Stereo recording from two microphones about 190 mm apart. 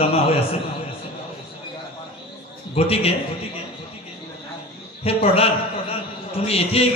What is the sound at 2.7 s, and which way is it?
Speech, 30° left (ahead or behind).